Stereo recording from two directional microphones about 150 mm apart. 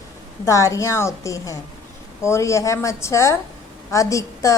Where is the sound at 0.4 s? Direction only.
20° left (ahead or behind).